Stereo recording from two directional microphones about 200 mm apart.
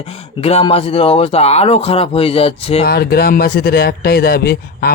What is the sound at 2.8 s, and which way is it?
Speech, 50° left (ahead or behind).